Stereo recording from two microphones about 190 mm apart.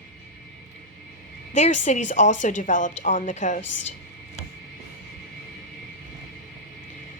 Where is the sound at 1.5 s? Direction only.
40° left (ahead or behind).